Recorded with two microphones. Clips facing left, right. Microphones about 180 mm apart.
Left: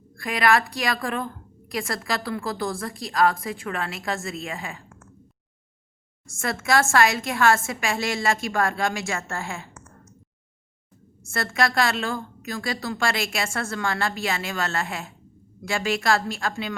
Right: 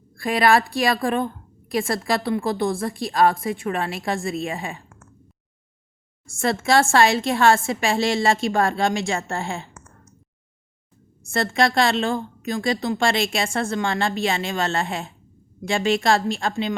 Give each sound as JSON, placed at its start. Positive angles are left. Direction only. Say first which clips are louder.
{"t": 0.2, "sound": "a woman's voice", "louder": "right 3 dB", "side_deg": -30}
{"t": 6.4, "sound": "a woman's voice", "louder": "right 4 dB", "side_deg": -30}
{"t": 11.3, "sound": "a woman's voice", "louder": "right 4 dB", "side_deg": -25}